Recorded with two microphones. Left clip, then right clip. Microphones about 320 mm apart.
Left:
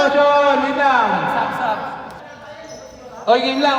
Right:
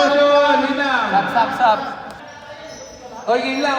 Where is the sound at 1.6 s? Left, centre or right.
Right.